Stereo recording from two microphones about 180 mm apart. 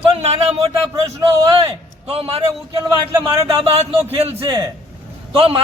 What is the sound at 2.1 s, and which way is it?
Speech, 35° right (ahead or behind).